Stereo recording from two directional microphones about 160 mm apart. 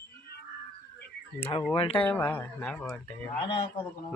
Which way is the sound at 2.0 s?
10° left (ahead or behind).